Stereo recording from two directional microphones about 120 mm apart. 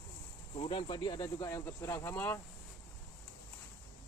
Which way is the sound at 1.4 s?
25° left (ahead or behind).